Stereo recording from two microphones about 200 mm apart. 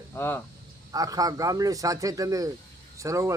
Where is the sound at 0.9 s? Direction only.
15° right (ahead or behind).